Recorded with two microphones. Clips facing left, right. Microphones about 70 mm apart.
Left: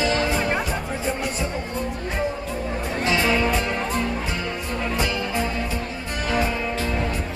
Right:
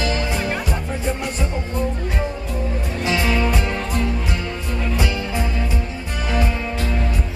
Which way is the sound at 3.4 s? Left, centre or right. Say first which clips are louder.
Even; centre.